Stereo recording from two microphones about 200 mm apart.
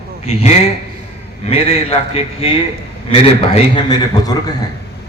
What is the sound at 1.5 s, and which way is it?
Speech, 30° left (ahead or behind).